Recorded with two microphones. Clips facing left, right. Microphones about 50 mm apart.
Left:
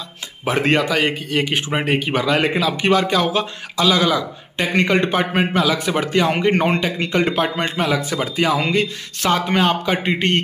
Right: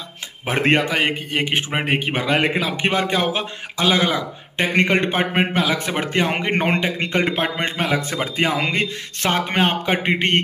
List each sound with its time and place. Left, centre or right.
0.5 s a man's voice: right